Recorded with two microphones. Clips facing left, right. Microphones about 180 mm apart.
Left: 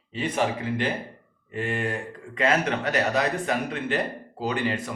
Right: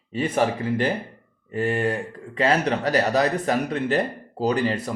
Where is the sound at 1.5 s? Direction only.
35° right (ahead or behind).